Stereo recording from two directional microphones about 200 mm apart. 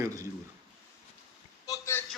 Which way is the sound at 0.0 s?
15° right (ahead or behind).